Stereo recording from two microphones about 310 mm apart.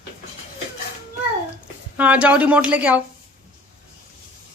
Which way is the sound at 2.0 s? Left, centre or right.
Centre.